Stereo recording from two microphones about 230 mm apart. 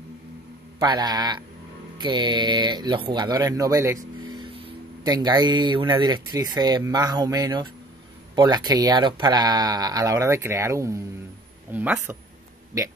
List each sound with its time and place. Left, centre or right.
0.7 s speech: centre